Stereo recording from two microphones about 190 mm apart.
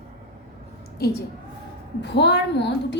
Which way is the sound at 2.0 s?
65° left (ahead or behind).